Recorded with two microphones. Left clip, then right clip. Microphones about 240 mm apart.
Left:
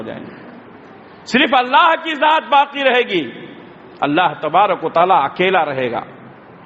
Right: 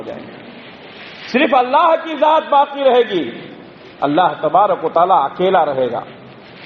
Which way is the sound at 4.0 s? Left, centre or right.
Left.